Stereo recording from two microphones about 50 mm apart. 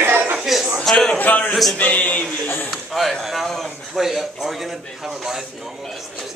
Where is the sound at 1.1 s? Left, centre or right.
Left.